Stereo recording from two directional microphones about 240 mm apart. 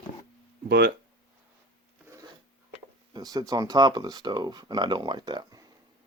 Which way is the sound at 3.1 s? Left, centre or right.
Centre.